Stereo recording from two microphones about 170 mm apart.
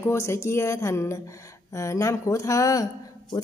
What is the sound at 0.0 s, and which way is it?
Speech, 15° left (ahead or behind).